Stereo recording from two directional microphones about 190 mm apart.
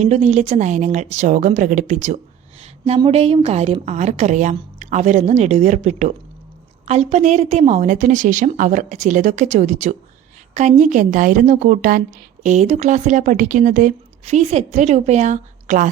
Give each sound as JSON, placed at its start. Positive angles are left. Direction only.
{"t": 0.0, "sound": "a woman's voice", "side_deg": -35}
{"t": 2.6, "sound": "a sound", "side_deg": -35}
{"t": 3.1, "sound": "a woman's voice", "side_deg": -30}